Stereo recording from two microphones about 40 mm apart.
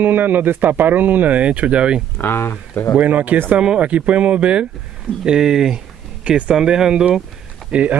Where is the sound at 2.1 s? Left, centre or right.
Left.